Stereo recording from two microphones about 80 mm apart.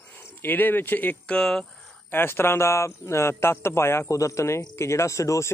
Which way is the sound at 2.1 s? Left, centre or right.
Left.